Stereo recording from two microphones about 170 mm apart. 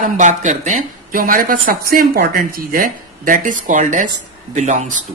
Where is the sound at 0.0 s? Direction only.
45° right (ahead or behind).